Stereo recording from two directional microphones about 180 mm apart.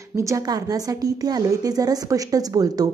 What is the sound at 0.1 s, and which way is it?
A woman's voice, 15° right (ahead or behind).